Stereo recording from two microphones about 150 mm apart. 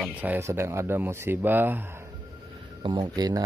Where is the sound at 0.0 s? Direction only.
10° right (ahead or behind).